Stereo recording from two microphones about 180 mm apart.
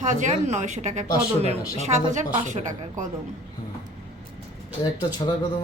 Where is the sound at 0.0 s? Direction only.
45° right (ahead or behind).